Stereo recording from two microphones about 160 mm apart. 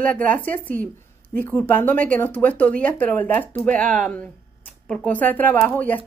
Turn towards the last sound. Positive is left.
turn(degrees=10)  # may be behind; listen again after turning